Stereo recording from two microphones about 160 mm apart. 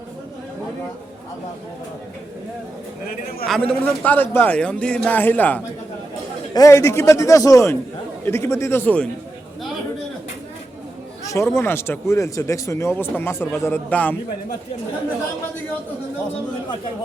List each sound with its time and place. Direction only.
3.4 s speech: 5° left (ahead or behind)
6.5 s a man's voice: 20° left (ahead or behind)
11.5 s speech: 15° left (ahead or behind)